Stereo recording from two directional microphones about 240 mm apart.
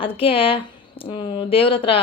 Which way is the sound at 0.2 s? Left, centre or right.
Left.